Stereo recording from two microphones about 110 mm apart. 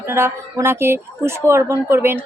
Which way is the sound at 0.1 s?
25° right (ahead or behind).